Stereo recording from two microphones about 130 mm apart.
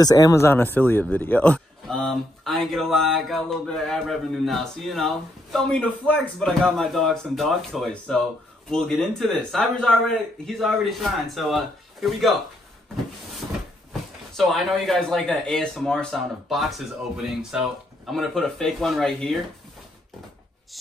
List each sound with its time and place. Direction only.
0.0 s speech: 25° left (ahead or behind); by 12.4 s centre (ahead or behind)
14.3 s speech: centre (ahead or behind)